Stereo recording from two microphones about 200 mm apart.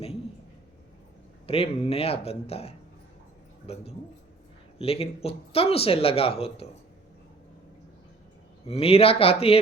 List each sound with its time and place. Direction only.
1.5 s speech: 30° left (ahead or behind)
8.6 s speech: 30° left (ahead or behind)